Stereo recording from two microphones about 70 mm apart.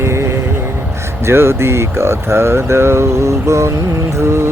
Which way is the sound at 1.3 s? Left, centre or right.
Right.